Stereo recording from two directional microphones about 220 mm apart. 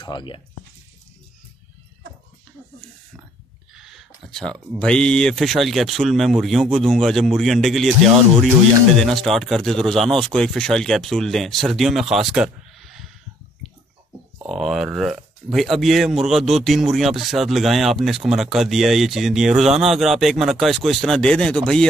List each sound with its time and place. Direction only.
0.0 s speech: 20° left (ahead or behind)
3.7 s speech: centre (ahead or behind)
8.9 s speech: centre (ahead or behind)
14.4 s speech: centre (ahead or behind)